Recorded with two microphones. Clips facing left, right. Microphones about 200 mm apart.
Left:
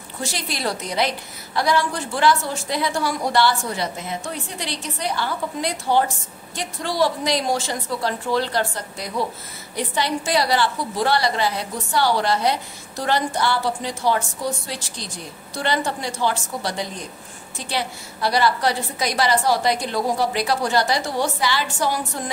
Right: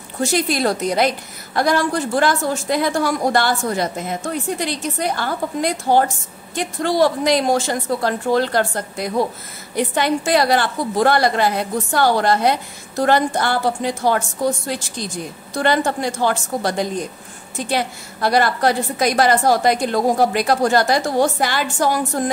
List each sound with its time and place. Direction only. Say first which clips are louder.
0.2 s a woman's voice: right 9 dB; 50° right (ahead or behind)